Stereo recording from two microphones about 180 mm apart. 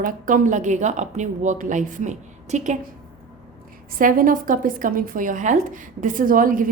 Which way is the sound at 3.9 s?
50° right (ahead or behind).